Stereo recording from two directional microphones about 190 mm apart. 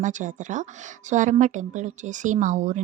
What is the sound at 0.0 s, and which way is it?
A woman's voice, 40° right (ahead or behind).